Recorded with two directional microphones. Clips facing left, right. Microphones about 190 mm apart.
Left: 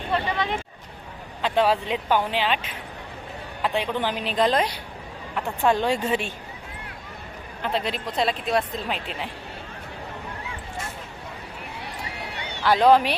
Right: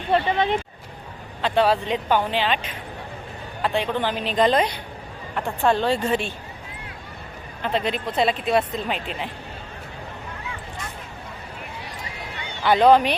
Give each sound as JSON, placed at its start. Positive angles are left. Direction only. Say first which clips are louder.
{"t": 0.1, "sound": "speech", "louder": "right 5 dB", "side_deg": -25}
{"t": 1.4, "sound": "speech", "louder": "right 2 dB", "side_deg": 10}
{"t": 7.6, "sound": "speech", "louder": "right 3 dB", "side_deg": 0}
{"t": 12.6, "sound": "speech", "louder": "right 2 dB", "side_deg": 0}